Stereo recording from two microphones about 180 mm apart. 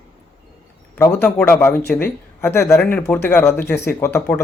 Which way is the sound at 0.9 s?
20° left (ahead or behind).